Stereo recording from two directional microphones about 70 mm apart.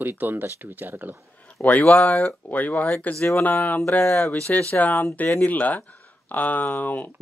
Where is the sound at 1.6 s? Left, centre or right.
Left.